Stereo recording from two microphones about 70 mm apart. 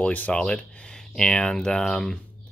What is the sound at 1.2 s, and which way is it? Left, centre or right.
Speech, centre.